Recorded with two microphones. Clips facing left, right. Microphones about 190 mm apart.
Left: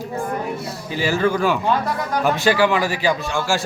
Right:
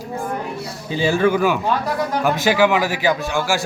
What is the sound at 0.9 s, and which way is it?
Speech, 20° right (ahead or behind).